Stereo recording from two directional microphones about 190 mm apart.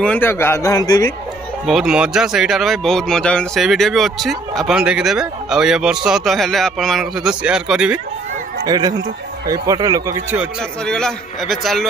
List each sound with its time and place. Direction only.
0.0 s speech: 10° left (ahead or behind)
1.7 s speech: 5° right (ahead or behind)
8.6 s speech: 20° right (ahead or behind)
10.6 s speech: 5° left (ahead or behind)